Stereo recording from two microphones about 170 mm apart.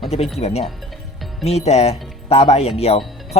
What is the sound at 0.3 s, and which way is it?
Speech, 40° left (ahead or behind).